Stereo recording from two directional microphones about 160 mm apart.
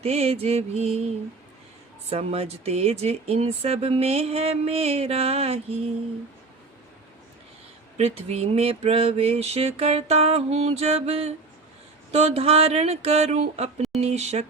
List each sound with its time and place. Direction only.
0.0 s speech: 40° right (ahead or behind)
2.0 s speech: 35° right (ahead or behind)
7.9 s speech: 40° right (ahead or behind)